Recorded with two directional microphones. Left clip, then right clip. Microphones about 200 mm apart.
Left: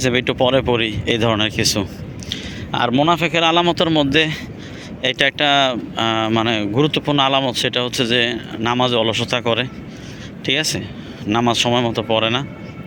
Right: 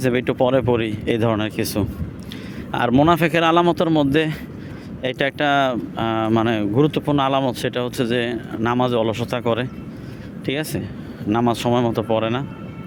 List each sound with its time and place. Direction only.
0.0 s speech: 10° right (ahead or behind)